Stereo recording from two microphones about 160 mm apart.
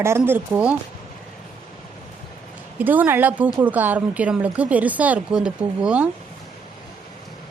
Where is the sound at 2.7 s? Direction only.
10° right (ahead or behind).